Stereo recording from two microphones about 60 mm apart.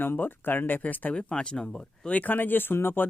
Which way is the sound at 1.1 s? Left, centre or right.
Centre.